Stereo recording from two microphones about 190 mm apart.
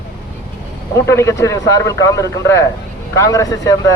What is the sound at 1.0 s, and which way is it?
Speech, 15° left (ahead or behind).